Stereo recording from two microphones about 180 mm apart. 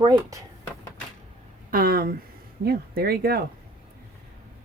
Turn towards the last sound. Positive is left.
turn(degrees=-60)  # may be behind; listen again after turning